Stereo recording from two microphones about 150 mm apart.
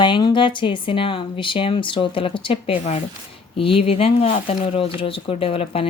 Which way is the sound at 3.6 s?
40° left (ahead or behind).